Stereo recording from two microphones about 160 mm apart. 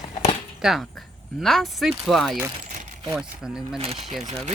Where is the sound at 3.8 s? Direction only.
35° right (ahead or behind).